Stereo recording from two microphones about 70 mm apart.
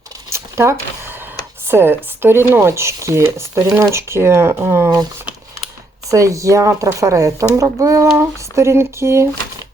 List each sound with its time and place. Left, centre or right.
0.3 s a sound: right
1.6 s speech: right
6.1 s speech: right